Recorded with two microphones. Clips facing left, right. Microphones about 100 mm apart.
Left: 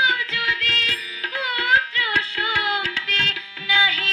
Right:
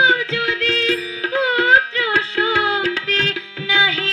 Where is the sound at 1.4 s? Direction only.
30° right (ahead or behind).